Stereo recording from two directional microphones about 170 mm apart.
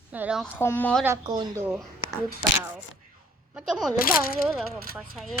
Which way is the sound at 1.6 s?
5° right (ahead or behind).